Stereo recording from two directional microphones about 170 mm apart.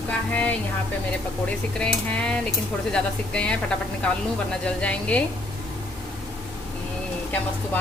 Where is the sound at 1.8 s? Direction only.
5° left (ahead or behind).